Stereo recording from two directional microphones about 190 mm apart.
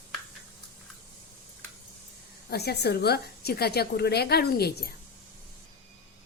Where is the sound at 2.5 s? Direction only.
60° left (ahead or behind).